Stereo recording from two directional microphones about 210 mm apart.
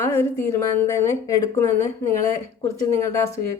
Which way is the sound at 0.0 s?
10° left (ahead or behind).